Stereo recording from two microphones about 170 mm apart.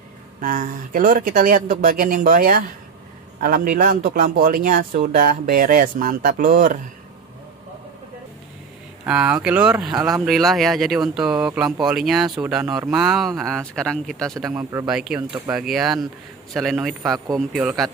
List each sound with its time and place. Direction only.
0.4 s speech: 55° right (ahead or behind)
9.0 s speech: 10° right (ahead or behind)